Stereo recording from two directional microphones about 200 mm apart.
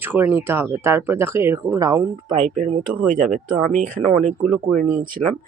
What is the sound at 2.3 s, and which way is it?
Speech, 40° right (ahead or behind).